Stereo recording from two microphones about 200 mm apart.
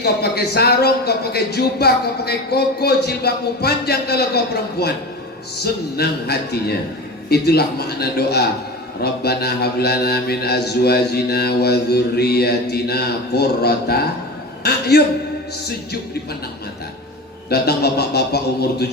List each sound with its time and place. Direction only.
0.0 s a man's voice: 55° left (ahead or behind)
6.0 s a man's voice: 55° left (ahead or behind)
14.6 s a sound: 55° left (ahead or behind)
17.5 s a man's voice: 55° left (ahead or behind)